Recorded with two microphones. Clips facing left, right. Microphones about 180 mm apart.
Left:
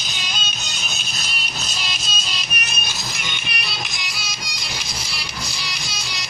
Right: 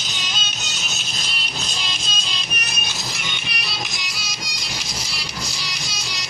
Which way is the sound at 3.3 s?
55° left (ahead or behind).